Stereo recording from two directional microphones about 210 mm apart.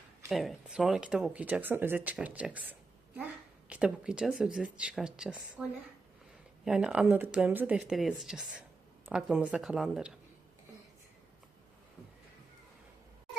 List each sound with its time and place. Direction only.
0.3 s speech: centre (ahead or behind)
6.7 s speech: 5° right (ahead or behind)